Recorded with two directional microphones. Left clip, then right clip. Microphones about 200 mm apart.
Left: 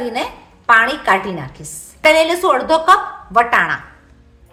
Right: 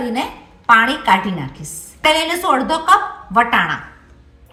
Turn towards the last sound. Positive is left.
turn(degrees=45)  # may be behind; listen again after turning